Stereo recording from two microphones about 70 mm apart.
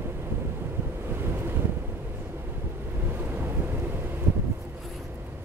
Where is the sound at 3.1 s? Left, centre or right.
Right.